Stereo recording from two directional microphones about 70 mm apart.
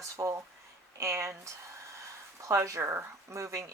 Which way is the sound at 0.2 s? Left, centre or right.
Right.